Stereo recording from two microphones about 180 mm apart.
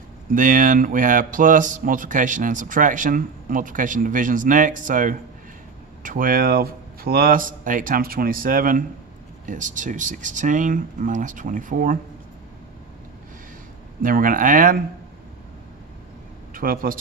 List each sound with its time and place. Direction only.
0.3 s speech: 45° right (ahead or behind)
14.0 s speech: 50° right (ahead or behind)
16.5 s a man's voice: 50° right (ahead or behind)